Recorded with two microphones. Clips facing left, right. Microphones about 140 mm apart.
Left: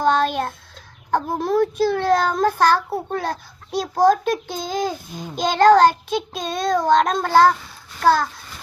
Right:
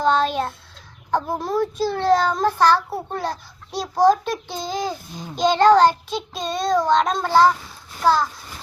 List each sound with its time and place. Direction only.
0.1 s child singing: 50° left (ahead or behind)
1.1 s a child's voice: 55° left (ahead or behind)